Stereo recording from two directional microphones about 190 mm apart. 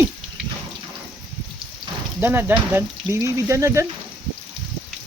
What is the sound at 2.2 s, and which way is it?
Speech, 10° right (ahead or behind).